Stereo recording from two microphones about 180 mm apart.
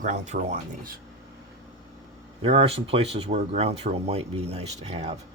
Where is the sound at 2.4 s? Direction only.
30° right (ahead or behind).